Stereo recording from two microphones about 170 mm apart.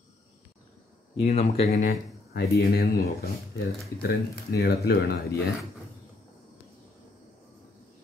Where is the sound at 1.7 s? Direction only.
70° left (ahead or behind).